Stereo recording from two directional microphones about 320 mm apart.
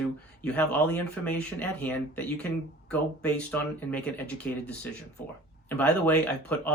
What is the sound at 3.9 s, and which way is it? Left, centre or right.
Speech, centre.